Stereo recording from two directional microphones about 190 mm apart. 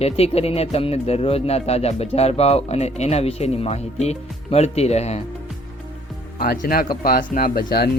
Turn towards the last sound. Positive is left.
turn(degrees=50)  # may be behind; listen again after turning